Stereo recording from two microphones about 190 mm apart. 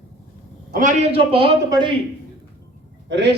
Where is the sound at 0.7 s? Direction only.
45° right (ahead or behind).